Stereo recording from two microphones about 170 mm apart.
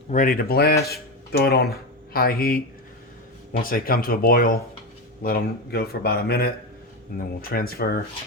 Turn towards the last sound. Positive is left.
turn(degrees=60)  # may be behind; listen again after turning